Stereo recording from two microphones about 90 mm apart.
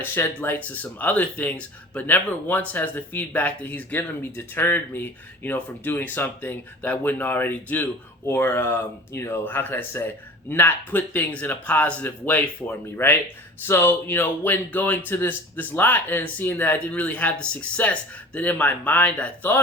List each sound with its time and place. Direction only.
0.0 s speech: 25° left (ahead or behind)